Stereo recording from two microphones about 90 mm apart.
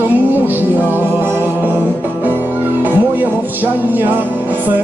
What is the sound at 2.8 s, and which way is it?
Music, 20° right (ahead or behind).